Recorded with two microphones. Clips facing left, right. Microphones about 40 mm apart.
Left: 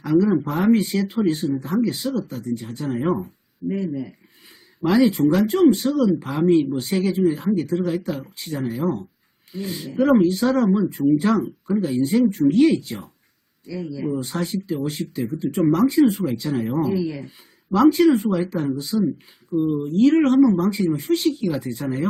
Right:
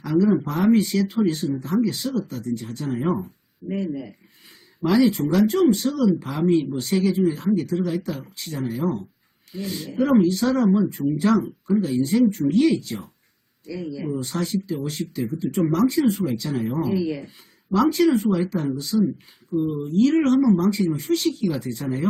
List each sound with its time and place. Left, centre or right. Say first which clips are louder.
0.0 s speech: left 1 dB; centre
3.7 s speech: left 2 dB; centre
4.8 s speech: left 2 dB; centre
13.7 s speech: left 2 dB; centre
14.1 s speech: even; centre